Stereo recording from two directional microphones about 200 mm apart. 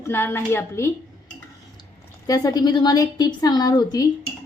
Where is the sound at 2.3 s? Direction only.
20° left (ahead or behind).